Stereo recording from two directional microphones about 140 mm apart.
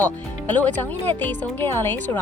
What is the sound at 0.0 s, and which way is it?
Speech, 10° left (ahead or behind).